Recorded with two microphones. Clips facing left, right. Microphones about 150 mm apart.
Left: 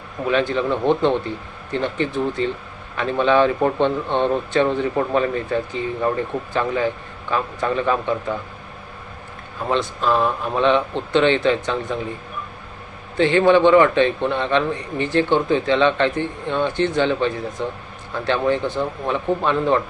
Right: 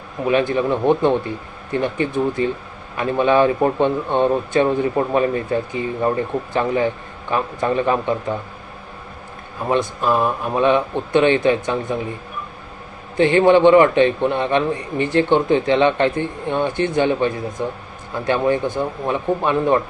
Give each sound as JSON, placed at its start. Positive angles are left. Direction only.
{"t": 0.3, "sound": "a man's voice", "side_deg": -15}
{"t": 9.6, "sound": "a man's voice", "side_deg": -10}
{"t": 13.1, "sound": "a man's voice", "side_deg": -15}